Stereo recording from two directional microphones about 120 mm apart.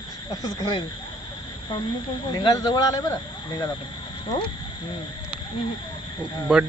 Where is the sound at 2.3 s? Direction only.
35° left (ahead or behind).